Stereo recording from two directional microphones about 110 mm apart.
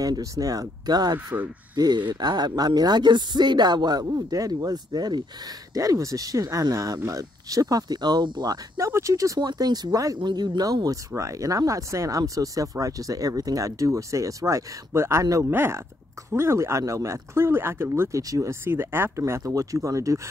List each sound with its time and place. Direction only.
0.0 s speech: 30° right (ahead or behind)
8.7 s speech: 25° right (ahead or behind)